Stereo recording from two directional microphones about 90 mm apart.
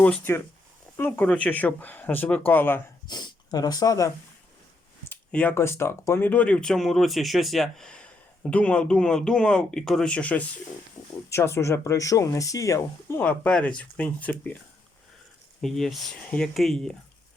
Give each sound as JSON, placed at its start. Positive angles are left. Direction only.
{"t": 0.3, "sound": "speech", "side_deg": 30}
{"t": 3.1, "sound": "speech", "side_deg": 55}
{"t": 5.3, "sound": "speech", "side_deg": 15}
{"t": 5.5, "sound": "speech", "side_deg": 30}
{"t": 11.3, "sound": "speech", "side_deg": 30}
{"t": 13.2, "sound": "speech", "side_deg": 15}
{"t": 15.6, "sound": "speech", "side_deg": 5}